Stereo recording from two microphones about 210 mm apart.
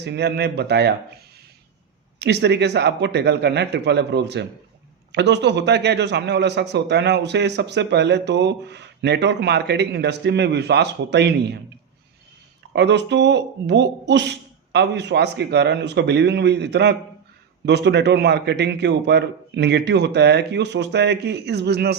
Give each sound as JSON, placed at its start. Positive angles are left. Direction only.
{"t": 0.0, "sound": "a man's voice", "side_deg": -50}
{"t": 2.1, "sound": "a man's voice", "side_deg": -55}
{"t": 12.7, "sound": "a man's voice", "side_deg": -55}